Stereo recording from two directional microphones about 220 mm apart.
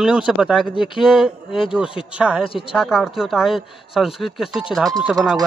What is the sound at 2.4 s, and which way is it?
Speech, 25° left (ahead or behind).